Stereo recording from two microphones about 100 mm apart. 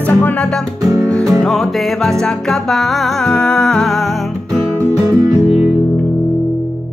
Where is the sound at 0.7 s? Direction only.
30° right (ahead or behind).